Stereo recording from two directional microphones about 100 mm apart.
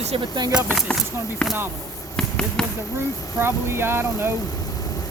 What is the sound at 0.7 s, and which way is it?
Speech, 5° left (ahead or behind).